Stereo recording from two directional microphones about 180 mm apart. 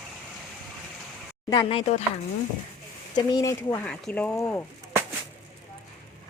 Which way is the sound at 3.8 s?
10° left (ahead or behind).